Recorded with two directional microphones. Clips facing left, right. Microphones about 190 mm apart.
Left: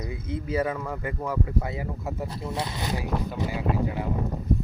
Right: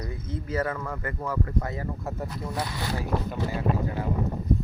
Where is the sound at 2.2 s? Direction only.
25° left (ahead or behind).